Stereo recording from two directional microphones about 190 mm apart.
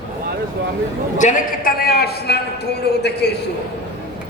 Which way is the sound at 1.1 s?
45° left (ahead or behind).